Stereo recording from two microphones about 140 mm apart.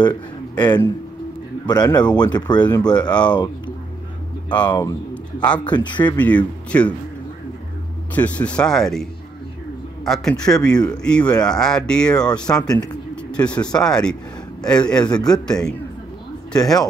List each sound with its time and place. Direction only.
0.0 s a man's voice: 30° left (ahead or behind)
5.1 s a sound: 10° left (ahead or behind)
5.6 s speech: 35° left (ahead or behind)
6.1 s speech: 10° left (ahead or behind)
8.1 s speech: 10° left (ahead or behind)
12.5 s speech: 15° left (ahead or behind)
13.1 s a sound: 10° left (ahead or behind)
13.7 s speech: 5° left (ahead or behind)